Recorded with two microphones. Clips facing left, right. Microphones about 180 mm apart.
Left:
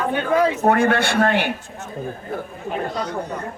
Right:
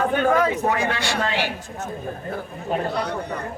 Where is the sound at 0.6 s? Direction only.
55° left (ahead or behind).